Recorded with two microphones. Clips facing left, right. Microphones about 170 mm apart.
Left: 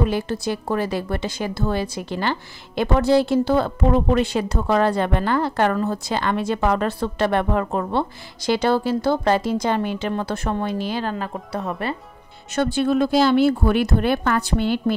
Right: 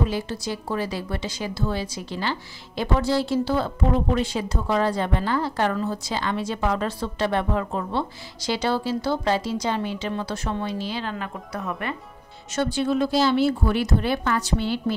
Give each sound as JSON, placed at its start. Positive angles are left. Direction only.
{"t": 0.0, "sound": "a woman's voice", "side_deg": 55}
{"t": 12.5, "sound": "a woman's voice", "side_deg": 60}